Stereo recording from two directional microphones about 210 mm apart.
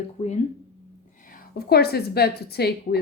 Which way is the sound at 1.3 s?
50° left (ahead or behind).